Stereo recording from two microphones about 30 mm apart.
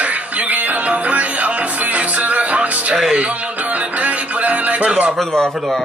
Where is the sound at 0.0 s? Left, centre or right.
Right.